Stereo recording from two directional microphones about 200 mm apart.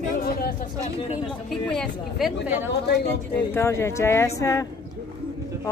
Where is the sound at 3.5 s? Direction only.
15° left (ahead or behind).